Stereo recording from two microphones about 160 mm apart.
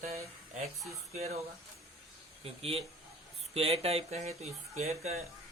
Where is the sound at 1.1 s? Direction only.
45° right (ahead or behind).